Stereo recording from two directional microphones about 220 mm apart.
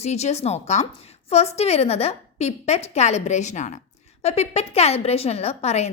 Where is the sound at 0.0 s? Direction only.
30° left (ahead or behind).